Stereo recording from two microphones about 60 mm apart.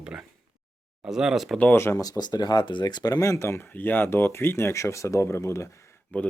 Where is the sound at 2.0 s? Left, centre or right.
Left.